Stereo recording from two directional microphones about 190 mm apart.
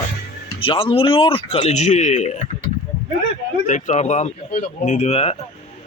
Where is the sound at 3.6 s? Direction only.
40° left (ahead or behind).